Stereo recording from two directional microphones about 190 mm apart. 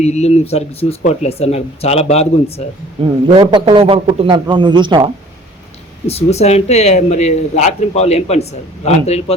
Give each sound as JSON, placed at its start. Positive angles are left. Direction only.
{"t": 0.0, "sound": "speech", "side_deg": 35}
{"t": 3.2, "sound": "a man's voice", "side_deg": -25}
{"t": 6.1, "sound": "speech", "side_deg": 35}